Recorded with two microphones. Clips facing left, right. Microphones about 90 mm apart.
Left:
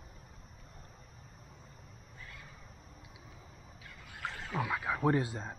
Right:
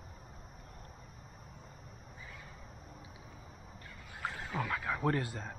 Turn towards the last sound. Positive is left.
turn(degrees=20)  # may be behind; listen again after turning